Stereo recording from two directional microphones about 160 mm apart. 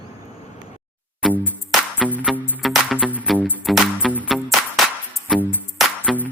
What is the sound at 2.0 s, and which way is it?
Music, 10° left (ahead or behind).